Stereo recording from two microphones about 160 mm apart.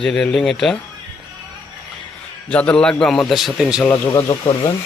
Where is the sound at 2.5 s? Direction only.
5° left (ahead or behind).